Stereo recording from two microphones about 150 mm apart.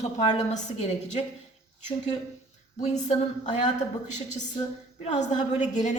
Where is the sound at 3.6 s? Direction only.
50° left (ahead or behind).